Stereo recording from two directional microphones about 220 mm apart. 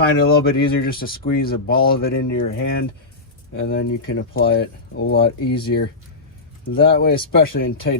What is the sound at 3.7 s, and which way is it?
Speech, 45° left (ahead or behind).